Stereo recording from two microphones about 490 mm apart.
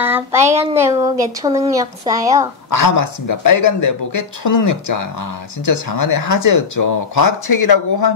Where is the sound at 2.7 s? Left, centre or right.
Left.